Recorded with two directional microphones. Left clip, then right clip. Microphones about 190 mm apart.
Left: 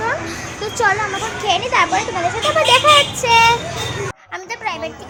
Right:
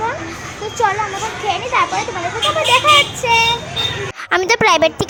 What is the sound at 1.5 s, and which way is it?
Speech, 10° left (ahead or behind).